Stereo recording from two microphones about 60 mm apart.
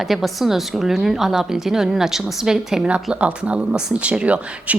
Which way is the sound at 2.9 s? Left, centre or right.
Right.